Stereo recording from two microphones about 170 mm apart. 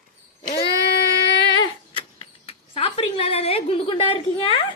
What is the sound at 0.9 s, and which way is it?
Singing, 90° left.